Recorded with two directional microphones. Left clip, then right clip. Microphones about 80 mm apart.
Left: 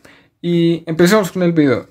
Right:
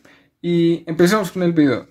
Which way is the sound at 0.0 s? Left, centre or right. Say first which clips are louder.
Left 2 dB; left.